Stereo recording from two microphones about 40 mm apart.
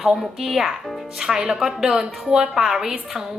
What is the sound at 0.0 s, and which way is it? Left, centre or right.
A woman's voice, centre.